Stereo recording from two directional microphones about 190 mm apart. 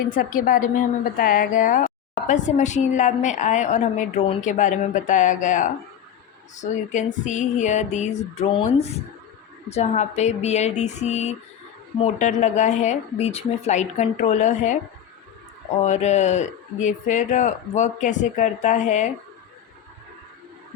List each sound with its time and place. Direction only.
0.1 s a woman's voice: 45° left (ahead or behind)
15.8 s a woman's voice: 35° left (ahead or behind)